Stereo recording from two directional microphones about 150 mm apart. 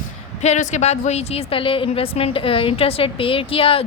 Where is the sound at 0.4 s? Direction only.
50° left (ahead or behind).